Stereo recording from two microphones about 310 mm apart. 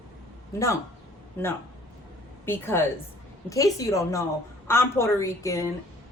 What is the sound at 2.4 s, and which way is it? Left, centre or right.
A woman's voice, centre.